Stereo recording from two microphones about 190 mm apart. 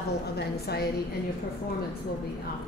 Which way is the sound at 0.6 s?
55° left (ahead or behind).